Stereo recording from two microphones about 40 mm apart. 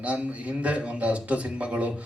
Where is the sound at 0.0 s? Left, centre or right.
Right.